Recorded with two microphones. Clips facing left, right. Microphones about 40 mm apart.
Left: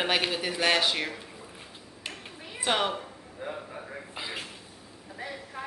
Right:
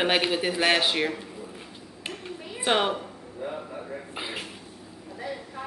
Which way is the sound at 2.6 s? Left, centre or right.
Centre.